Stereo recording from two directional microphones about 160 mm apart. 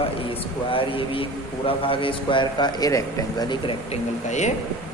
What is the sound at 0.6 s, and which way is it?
Speech, 35° left (ahead or behind).